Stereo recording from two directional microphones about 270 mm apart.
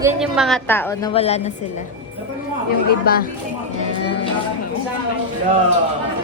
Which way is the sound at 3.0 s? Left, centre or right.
Left.